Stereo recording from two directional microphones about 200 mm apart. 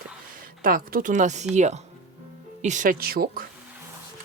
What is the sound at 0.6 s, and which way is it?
Speech, 45° right (ahead or behind).